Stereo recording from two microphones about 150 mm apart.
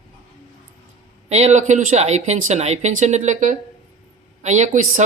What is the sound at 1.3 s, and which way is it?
Speech, 50° right (ahead or behind).